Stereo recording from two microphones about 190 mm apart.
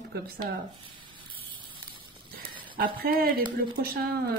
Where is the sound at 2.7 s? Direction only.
50° right (ahead or behind).